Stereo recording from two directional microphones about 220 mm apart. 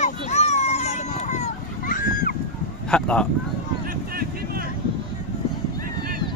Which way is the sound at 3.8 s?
45° right (ahead or behind).